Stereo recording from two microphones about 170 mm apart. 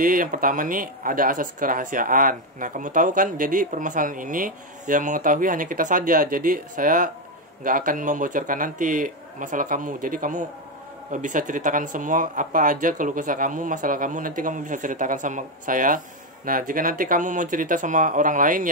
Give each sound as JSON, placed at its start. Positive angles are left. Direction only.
{"t": 0.0, "sound": "speech", "side_deg": -55}